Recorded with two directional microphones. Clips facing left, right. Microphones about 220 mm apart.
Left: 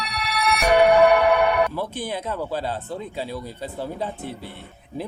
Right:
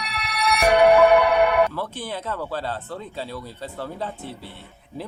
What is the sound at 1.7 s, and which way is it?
Speech, 15° left (ahead or behind).